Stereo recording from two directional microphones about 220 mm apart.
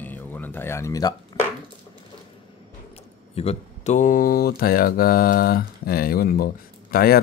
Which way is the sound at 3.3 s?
30° left (ahead or behind).